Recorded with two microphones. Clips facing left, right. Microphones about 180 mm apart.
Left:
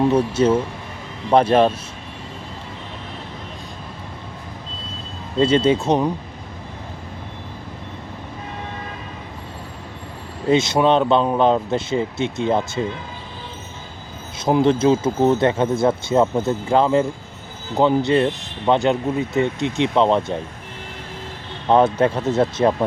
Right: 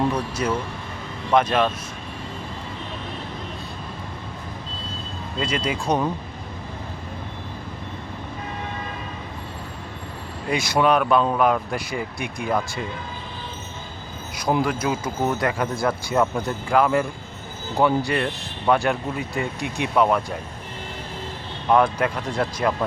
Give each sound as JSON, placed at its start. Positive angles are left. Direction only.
{"t": 0.0, "sound": "a man's voice", "side_deg": 25}
{"t": 5.4, "sound": "speech", "side_deg": 30}
{"t": 10.5, "sound": "speech", "side_deg": 20}
{"t": 14.3, "sound": "speech", "side_deg": 25}
{"t": 21.7, "sound": "speech", "side_deg": 25}